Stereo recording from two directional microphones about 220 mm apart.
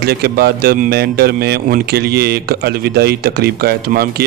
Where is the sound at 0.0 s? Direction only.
45° right (ahead or behind).